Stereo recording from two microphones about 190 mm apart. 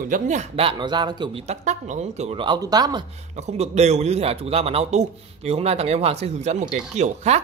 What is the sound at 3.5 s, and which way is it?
A man's voice, 35° right (ahead or behind).